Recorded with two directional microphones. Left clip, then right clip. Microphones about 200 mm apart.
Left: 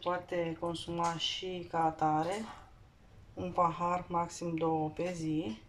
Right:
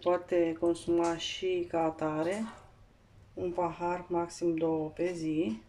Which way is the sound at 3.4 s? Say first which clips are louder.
Left 1 dB; centre (ahead or behind).